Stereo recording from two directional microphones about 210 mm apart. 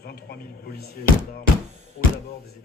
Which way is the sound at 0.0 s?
50° left (ahead or behind).